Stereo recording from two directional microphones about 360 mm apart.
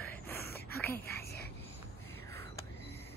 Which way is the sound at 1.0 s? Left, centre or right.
Left.